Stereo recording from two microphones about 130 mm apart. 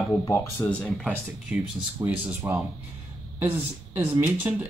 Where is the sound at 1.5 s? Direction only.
15° right (ahead or behind).